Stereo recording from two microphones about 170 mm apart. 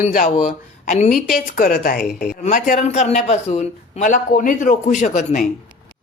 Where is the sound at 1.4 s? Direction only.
55° left (ahead or behind).